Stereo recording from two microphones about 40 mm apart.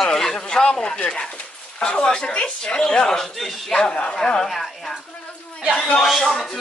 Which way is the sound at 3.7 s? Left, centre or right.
Left.